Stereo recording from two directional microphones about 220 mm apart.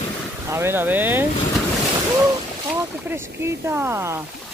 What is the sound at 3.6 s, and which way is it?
Speech, 10° right (ahead or behind).